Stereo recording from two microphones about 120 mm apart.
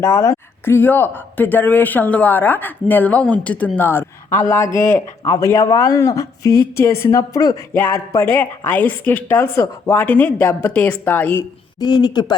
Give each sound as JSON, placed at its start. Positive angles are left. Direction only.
{"t": 0.0, "sound": "speech", "side_deg": 25}
{"t": 4.6, "sound": "speech", "side_deg": 90}
{"t": 5.2, "sound": "speech", "side_deg": 30}
{"t": 11.8, "sound": "a man's voice", "side_deg": 35}